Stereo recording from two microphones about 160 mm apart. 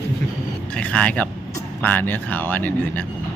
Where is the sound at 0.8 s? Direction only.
10° left (ahead or behind).